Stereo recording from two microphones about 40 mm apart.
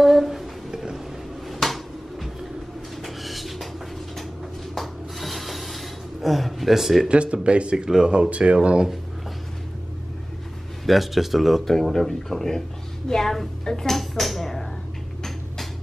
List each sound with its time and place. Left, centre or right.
0.0 s a sound: centre
3.0 s music: centre
4.7 s rub: centre
7.1 s speech: right
7.7 s speech: centre
8.1 s speech: right
10.9 s speech: centre